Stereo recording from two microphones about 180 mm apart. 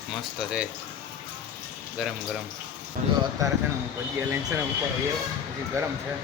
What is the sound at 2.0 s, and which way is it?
Dishes, 5° right (ahead or behind).